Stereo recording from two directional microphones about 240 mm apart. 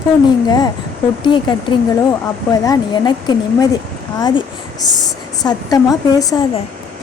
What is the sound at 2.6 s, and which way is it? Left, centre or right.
A woman's voice, centre.